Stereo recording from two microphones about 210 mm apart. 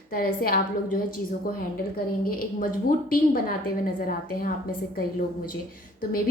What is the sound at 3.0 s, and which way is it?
A woman's voice, 45° left (ahead or behind).